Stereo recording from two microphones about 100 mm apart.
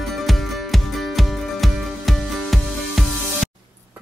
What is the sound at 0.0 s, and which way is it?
Music, centre (ahead or behind).